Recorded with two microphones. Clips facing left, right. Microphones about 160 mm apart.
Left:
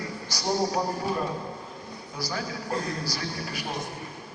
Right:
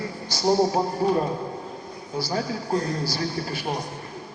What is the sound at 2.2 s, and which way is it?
A man's voice, 25° right (ahead or behind).